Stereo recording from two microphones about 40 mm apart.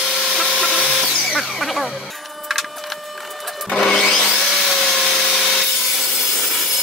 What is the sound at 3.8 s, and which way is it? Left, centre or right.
Wood, left.